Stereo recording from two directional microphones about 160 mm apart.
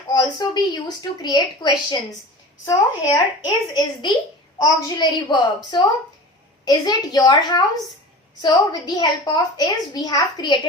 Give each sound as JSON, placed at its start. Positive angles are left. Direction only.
{"t": 0.1, "sound": "a woman's voice", "side_deg": 25}